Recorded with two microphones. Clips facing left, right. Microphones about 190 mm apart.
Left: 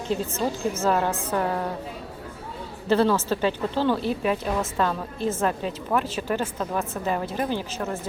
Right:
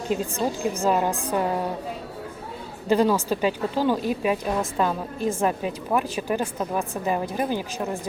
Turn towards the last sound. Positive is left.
turn(degrees=-15)  # may be behind; listen again after turning